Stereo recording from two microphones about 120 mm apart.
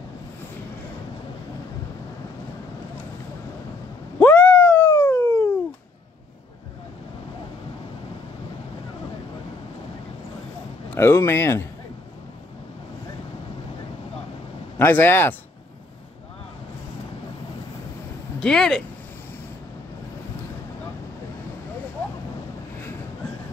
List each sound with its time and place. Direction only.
4.2 s a sound: 15° left (ahead or behind)
11.0 s speech: 20° left (ahead or behind)
14.8 s speech: 15° left (ahead or behind)
18.4 s speech: 5° left (ahead or behind)